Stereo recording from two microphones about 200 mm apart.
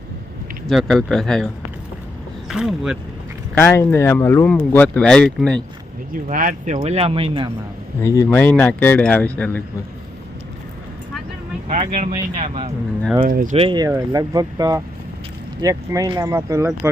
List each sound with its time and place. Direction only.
0.7 s speech: centre (ahead or behind)
2.5 s speech: 5° right (ahead or behind)
3.6 s speech: 15° left (ahead or behind)
6.2 s speech: 45° right (ahead or behind); by 7.5 s 25° right (ahead or behind)
8.0 s speech: 15° left (ahead or behind)
11.8 s speech: 35° right (ahead or behind)
13.2 s speech: 40° right (ahead or behind)
13.6 s speech: 20° right (ahead or behind)